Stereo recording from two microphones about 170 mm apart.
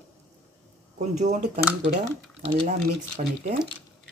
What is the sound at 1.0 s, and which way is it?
Speech, 45° right (ahead or behind).